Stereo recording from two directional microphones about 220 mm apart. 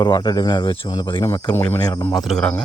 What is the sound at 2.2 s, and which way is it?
Speech, centre (ahead or behind).